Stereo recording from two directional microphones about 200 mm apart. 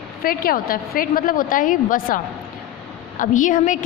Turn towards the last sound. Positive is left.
turn(degrees=40)  # may be behind; listen again after turning